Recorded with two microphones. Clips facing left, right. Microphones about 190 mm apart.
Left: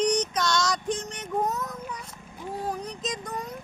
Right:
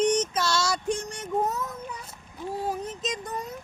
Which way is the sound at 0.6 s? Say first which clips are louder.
Even; 10° right (ahead or behind).